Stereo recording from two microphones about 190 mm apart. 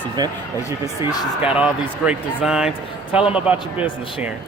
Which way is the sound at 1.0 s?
5° right (ahead or behind).